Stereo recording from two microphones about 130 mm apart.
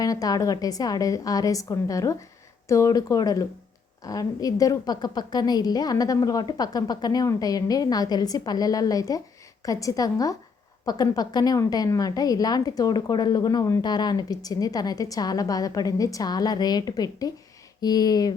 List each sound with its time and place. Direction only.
0.0 s a woman's voice: 30° left (ahead or behind)